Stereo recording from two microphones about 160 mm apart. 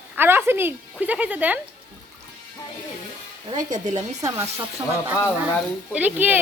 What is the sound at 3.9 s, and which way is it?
Speech, 20° right (ahead or behind).